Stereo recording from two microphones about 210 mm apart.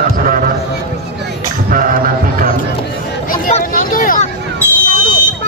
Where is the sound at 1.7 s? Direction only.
40° right (ahead or behind).